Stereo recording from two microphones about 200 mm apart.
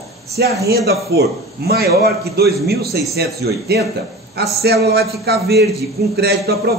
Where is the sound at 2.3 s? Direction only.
55° right (ahead or behind).